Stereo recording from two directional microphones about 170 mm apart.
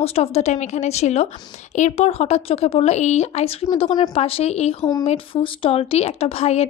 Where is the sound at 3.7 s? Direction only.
25° left (ahead or behind).